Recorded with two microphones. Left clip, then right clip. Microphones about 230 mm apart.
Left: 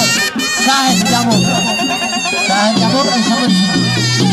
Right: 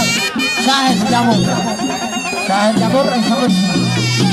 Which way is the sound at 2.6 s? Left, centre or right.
Centre.